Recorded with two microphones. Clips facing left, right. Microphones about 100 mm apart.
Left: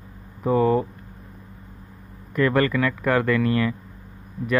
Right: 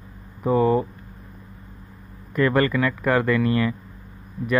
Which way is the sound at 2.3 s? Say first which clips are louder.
Even; 25° right (ahead or behind).